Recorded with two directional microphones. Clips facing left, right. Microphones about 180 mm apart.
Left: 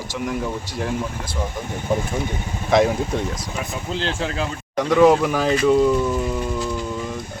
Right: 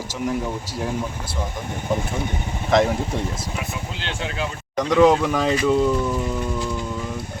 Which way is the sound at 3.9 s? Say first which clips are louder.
Left 5 dB; 40° left (ahead or behind).